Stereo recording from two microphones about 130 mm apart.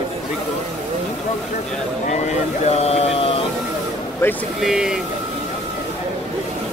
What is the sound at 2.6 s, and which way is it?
Speech, 55° left (ahead or behind).